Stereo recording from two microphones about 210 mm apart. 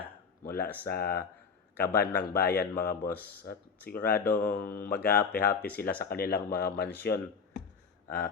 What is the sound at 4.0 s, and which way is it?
Speech, 45° left (ahead or behind).